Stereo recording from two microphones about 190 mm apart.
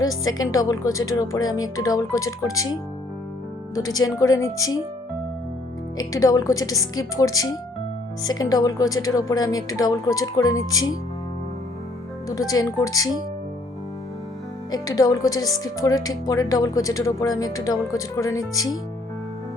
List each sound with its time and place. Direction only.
0.1 s a woman's voice: 20° left (ahead or behind)
3.8 s a woman's voice: 20° left (ahead or behind)
6.0 s a woman's voice: 20° left (ahead or behind)
12.3 s speech: 20° left (ahead or behind)
14.7 s speech: 20° left (ahead or behind)